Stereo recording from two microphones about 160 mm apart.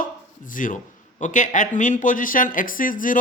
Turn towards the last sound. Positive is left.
turn(degrees=55)  # may be behind; listen again after turning